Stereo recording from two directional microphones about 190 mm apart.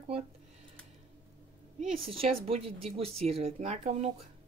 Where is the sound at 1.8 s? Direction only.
30° right (ahead or behind).